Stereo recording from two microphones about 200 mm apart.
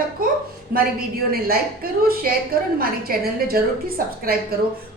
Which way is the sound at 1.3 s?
50° right (ahead or behind).